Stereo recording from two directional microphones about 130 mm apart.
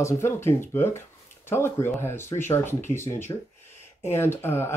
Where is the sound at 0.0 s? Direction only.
20° left (ahead or behind).